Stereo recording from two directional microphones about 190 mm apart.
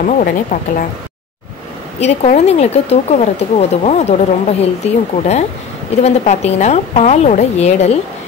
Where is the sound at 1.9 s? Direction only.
35° left (ahead or behind).